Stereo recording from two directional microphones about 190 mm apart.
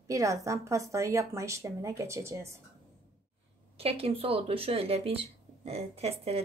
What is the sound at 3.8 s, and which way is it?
Speech, 30° right (ahead or behind).